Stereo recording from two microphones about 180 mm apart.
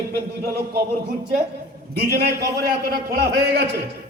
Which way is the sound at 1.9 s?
60° right (ahead or behind).